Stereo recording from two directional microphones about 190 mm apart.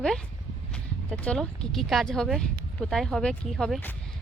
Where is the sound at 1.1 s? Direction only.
5° left (ahead or behind).